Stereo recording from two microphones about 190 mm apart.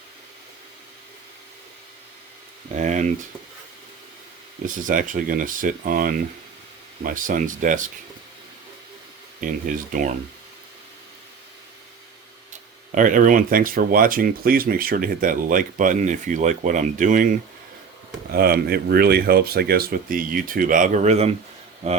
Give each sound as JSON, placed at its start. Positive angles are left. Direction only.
{"t": 2.7, "sound": "speech", "side_deg": -40}
{"t": 4.6, "sound": "speech", "side_deg": -45}
{"t": 9.4, "sound": "speech", "side_deg": -45}
{"t": 12.9, "sound": "speech", "side_deg": -45}
{"t": 18.3, "sound": "speech", "side_deg": -55}